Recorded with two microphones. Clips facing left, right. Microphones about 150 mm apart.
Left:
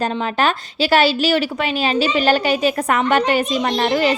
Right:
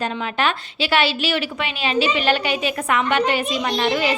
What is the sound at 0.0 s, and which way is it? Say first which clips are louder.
A woman's voice: left 4 dB; 35° left (ahead or behind).